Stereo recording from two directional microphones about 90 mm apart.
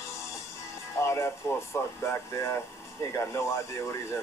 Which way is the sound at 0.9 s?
35° left (ahead or behind).